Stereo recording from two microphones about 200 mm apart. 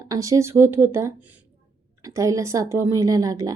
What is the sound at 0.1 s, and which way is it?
A woman's voice, 15° right (ahead or behind).